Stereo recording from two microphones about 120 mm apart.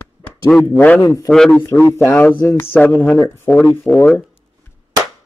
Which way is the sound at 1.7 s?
25° left (ahead or behind).